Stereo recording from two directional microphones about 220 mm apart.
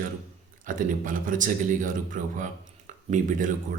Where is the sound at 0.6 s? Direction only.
40° right (ahead or behind).